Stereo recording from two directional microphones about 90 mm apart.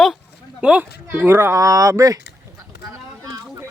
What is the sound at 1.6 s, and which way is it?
Speech, 35° right (ahead or behind).